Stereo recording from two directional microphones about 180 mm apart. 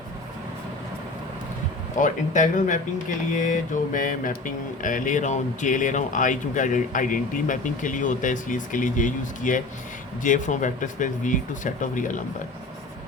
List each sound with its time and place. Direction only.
2.0 s mantra: 45° left (ahead or behind)